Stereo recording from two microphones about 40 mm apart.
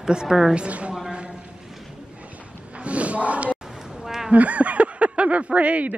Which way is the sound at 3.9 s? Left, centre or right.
Centre.